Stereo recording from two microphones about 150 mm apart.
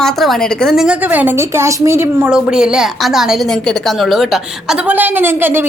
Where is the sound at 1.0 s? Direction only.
10° right (ahead or behind).